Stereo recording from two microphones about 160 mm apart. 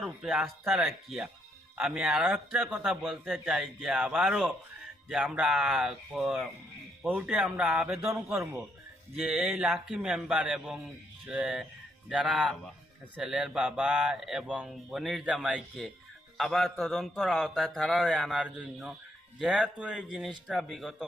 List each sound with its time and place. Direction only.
0.0 s a man's voice: centre (ahead or behind)
8.0 s a man's voice: 15° right (ahead or behind)
9.1 s a man's voice: 5° right (ahead or behind)